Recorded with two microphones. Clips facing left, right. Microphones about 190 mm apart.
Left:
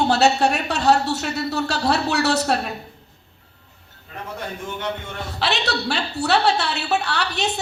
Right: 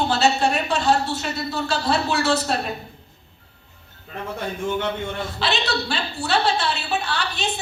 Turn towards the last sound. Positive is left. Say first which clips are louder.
# left 2 dB
turn(degrees=70)  # may be behind; listen again after turning